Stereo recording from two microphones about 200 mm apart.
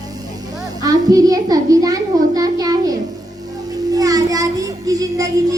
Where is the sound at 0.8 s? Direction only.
20° right (ahead or behind).